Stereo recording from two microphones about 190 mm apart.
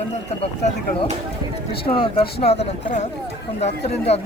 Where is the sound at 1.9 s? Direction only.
30° left (ahead or behind).